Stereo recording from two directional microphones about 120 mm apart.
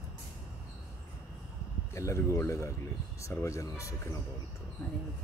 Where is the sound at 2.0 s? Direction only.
25° left (ahead or behind).